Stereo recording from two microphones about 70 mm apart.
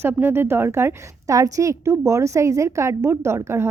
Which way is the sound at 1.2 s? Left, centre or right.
Right.